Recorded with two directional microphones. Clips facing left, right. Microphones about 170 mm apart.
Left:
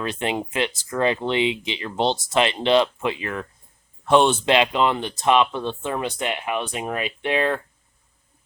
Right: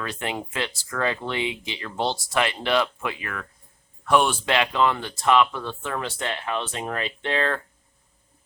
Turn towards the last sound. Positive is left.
turn(degrees=15)  # may be behind; listen again after turning